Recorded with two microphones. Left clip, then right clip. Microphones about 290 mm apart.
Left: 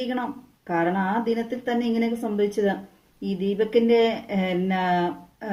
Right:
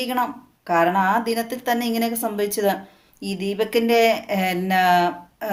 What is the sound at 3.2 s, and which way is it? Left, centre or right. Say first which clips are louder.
Speech: right 1 dB; right.